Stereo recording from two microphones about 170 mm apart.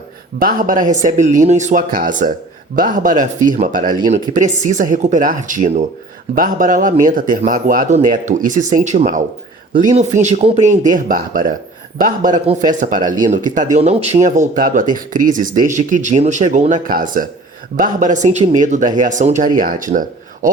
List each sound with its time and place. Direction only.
0.3 s speech: 55° right (ahead or behind)